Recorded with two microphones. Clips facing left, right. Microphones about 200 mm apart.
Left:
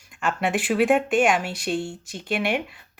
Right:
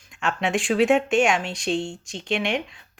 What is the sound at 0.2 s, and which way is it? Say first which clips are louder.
A woman's voice: even; 5° left (ahead or behind).